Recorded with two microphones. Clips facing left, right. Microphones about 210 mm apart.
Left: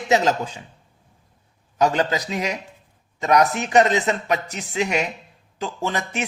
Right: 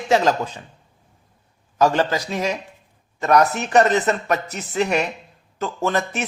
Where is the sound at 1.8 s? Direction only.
20° left (ahead or behind).